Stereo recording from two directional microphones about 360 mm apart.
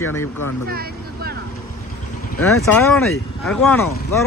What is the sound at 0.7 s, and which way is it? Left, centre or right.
Vehicle, right.